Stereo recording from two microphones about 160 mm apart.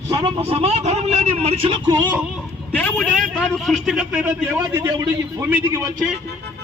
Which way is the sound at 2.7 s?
10° left (ahead or behind).